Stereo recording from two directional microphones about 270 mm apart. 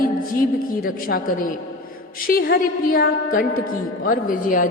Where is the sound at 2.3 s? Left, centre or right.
Left.